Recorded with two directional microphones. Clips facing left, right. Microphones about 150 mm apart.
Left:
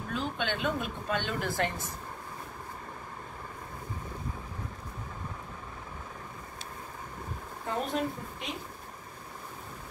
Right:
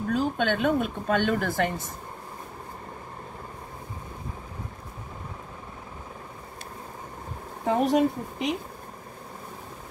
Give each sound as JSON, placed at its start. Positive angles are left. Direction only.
{"t": 0.1, "sound": "speech", "side_deg": -50}
{"t": 7.6, "sound": "speech", "side_deg": -80}